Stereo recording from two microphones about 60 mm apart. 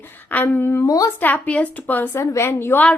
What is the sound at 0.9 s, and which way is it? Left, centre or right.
Speech, left.